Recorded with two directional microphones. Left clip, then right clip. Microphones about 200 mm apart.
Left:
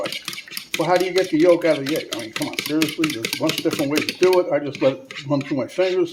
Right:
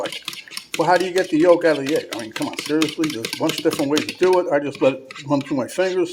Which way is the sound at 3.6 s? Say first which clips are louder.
Right 1 dB; 35° right (ahead or behind).